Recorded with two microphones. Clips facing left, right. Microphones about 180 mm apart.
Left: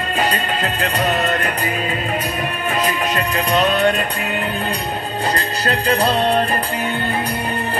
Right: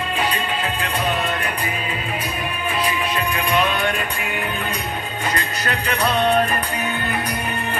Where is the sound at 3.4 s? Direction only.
40° left (ahead or behind).